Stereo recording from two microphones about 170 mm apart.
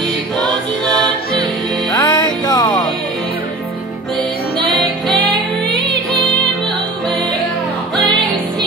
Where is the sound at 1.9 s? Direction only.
20° left (ahead or behind).